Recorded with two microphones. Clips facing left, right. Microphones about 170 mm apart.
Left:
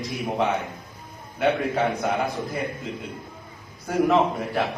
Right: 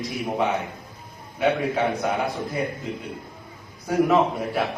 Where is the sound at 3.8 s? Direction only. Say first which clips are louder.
Right 1 dB; centre (ahead or behind).